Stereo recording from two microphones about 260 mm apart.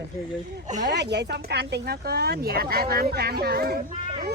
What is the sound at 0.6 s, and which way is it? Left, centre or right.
Speech, right.